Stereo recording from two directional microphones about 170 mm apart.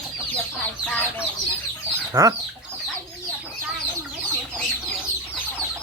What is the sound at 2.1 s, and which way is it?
Chicken, 20° right (ahead or behind).